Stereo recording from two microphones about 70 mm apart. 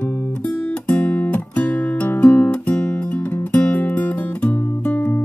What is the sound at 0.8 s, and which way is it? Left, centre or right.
Guitar, centre.